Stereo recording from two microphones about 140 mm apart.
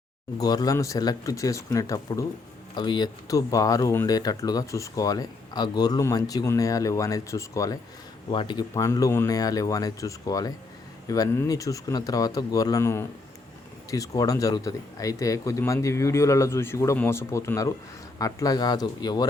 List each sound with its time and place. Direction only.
0.3 s speech: 25° left (ahead or behind)
8.3 s speech: 35° left (ahead or behind)